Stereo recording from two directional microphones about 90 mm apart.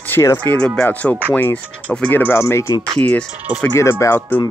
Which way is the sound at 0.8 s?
20° left (ahead or behind).